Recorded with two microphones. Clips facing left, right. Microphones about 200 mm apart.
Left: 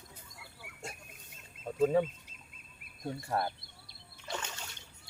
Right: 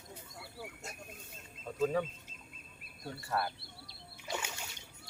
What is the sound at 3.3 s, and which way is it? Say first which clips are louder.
Speech: left 1 dB; 25° left (ahead or behind).